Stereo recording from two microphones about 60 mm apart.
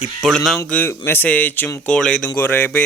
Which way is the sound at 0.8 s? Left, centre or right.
Left.